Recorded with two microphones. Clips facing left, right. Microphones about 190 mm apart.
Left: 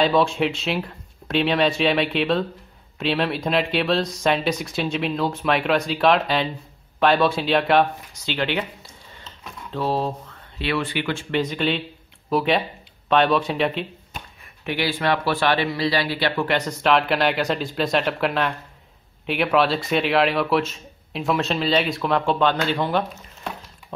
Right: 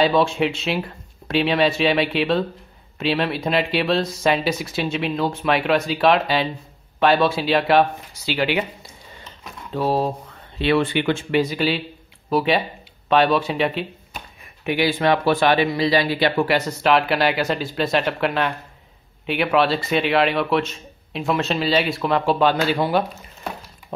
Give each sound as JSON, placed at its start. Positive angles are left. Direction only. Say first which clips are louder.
{"t": 0.0, "sound": "speech", "louder": "right 1 dB", "side_deg": 0}
{"t": 10.6, "sound": "speech", "louder": "right 6 dB", "side_deg": -25}
{"t": 11.3, "sound": "speech", "louder": "right 1 dB", "side_deg": -5}
{"t": 14.6, "sound": "speech", "louder": "right 4 dB", "side_deg": -15}